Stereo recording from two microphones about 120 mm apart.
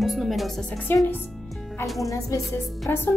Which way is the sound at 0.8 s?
15° left (ahead or behind).